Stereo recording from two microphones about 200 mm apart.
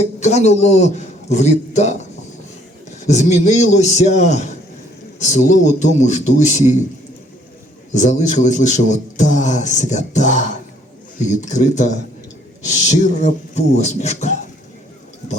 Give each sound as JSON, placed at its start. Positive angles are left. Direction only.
{"t": 0.2, "sound": "a man's voice", "side_deg": 35}
{"t": 3.1, "sound": "a man's voice", "side_deg": 35}
{"t": 7.9, "sound": "a man's voice", "side_deg": 35}